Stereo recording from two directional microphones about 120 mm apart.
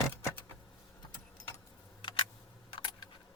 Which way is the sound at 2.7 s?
40° left (ahead or behind).